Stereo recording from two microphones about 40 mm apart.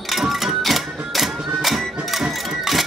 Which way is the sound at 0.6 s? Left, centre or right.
Centre.